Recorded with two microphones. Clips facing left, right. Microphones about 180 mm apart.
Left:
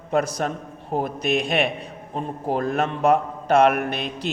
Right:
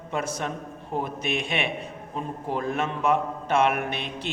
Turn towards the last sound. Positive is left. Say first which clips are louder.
# left 4 dB
turn(degrees=40)  # may be behind; listen again after turning